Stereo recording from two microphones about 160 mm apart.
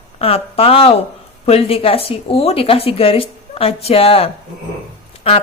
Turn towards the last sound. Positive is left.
turn(degrees=35)  # may be behind; listen again after turning